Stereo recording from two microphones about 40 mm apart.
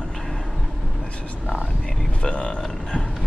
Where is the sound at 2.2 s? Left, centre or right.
Left.